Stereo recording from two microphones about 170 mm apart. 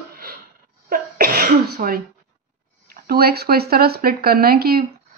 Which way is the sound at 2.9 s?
65° right (ahead or behind).